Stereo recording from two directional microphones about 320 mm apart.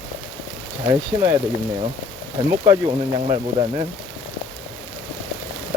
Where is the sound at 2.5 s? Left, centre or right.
Centre.